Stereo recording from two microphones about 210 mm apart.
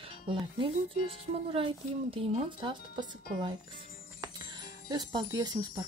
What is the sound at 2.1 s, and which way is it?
Speech, 25° right (ahead or behind).